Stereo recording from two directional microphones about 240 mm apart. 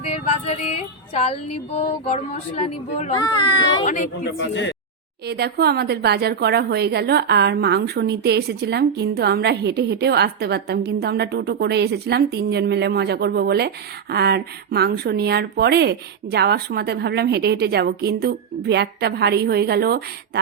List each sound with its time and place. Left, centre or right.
0.0 s music: left
1.5 s speech: left
3.8 s a woman's voice: left
5.2 s a woman's voice: right